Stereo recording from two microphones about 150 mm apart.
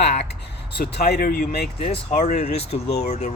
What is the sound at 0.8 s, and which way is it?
Speech, 90° left.